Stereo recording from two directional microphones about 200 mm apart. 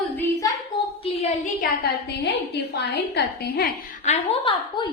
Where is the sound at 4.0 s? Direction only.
30° left (ahead or behind).